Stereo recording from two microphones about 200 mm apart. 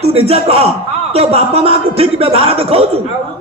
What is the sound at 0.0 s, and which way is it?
Speech, 30° right (ahead or behind).